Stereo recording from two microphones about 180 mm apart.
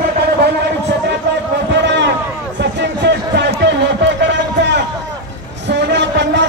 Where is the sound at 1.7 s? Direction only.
75° right (ahead or behind).